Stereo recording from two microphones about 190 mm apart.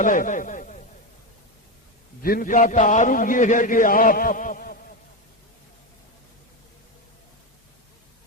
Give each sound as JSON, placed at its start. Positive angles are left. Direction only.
{"t": 0.0, "sound": "a man's voice", "side_deg": 40}
{"t": 2.2, "sound": "a man's voice", "side_deg": 50}